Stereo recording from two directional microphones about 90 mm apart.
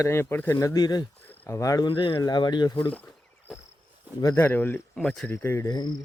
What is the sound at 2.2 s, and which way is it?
Speech, 50° left (ahead or behind).